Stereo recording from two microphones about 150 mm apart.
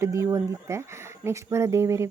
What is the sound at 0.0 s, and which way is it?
Speech, 20° right (ahead or behind).